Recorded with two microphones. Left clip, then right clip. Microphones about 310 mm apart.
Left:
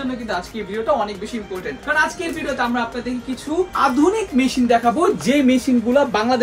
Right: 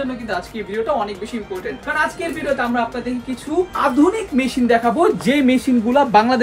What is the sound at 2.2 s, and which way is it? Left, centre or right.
A woman's voice, centre.